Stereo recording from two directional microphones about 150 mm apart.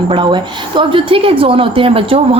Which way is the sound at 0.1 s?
30° right (ahead or behind).